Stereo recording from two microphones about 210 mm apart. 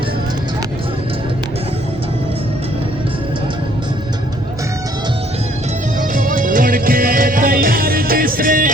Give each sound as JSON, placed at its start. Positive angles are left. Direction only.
{"t": 6.0, "sound": "music", "side_deg": -40}